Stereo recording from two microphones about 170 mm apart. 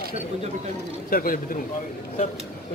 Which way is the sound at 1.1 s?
55° left (ahead or behind).